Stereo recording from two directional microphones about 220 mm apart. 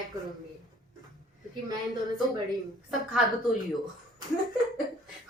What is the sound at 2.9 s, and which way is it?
Speech, centre (ahead or behind).